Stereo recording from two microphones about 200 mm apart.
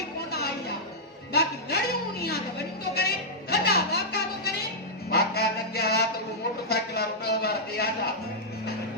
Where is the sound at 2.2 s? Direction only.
50° left (ahead or behind).